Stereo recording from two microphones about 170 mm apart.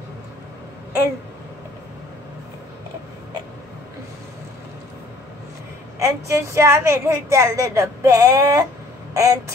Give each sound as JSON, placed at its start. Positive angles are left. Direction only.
{"t": 5.9, "sound": "a woman's voice", "side_deg": -15}